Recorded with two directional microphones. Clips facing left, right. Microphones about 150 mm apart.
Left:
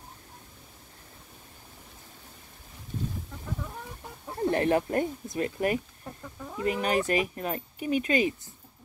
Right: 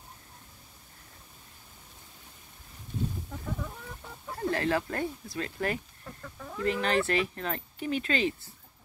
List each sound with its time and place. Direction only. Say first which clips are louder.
4.5 s speech: left 4 dB; 20° left (ahead or behind)